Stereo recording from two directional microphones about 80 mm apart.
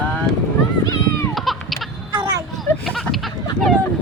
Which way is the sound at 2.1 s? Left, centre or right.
Right.